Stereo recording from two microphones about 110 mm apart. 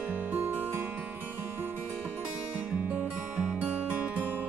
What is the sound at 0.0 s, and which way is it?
Music, 15° right (ahead or behind).